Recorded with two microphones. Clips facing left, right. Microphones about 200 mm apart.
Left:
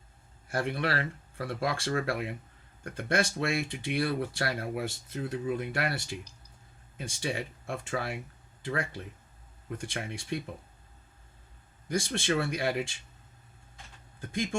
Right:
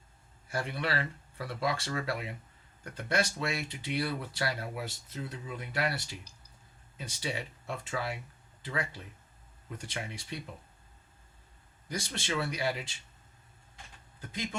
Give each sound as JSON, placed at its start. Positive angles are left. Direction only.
{"t": 0.5, "sound": "speech", "side_deg": 55}
{"t": 11.9, "sound": "speech", "side_deg": 50}